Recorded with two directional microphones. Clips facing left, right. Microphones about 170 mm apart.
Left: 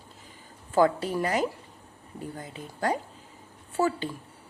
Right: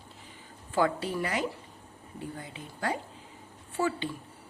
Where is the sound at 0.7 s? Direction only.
40° left (ahead or behind).